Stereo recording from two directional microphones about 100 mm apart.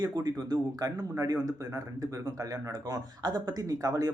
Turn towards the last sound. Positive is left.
turn(degrees=-35)  # may be behind; listen again after turning